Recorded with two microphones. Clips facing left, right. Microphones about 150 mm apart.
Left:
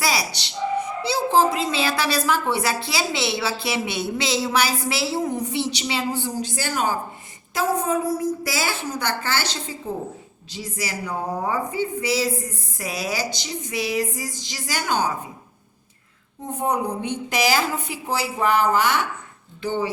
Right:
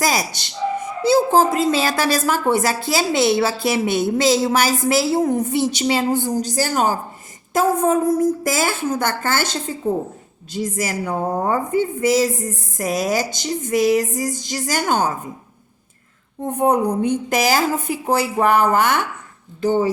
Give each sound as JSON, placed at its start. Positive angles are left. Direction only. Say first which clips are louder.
{"t": 0.0, "sound": "a woman's voice", "louder": "right 4 dB", "side_deg": -45}
{"t": 16.4, "sound": "a woman's voice", "louder": "right 7 dB", "side_deg": -55}